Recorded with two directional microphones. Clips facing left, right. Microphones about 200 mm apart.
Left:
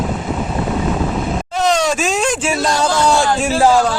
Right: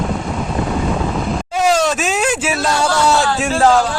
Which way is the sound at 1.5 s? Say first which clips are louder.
Right 1 dB; 5° right (ahead or behind).